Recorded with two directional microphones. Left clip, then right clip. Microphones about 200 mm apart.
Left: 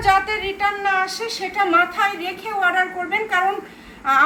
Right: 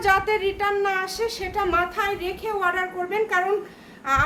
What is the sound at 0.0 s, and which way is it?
A woman's voice, 55° right (ahead or behind).